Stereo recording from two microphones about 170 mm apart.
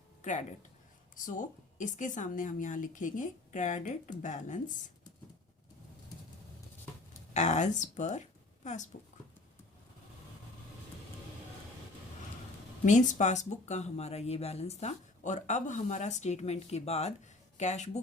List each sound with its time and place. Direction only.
0.2 s a woman's voice: 45° left (ahead or behind)
7.3 s a woman's voice: 45° left (ahead or behind)
12.8 s speech: 45° left (ahead or behind)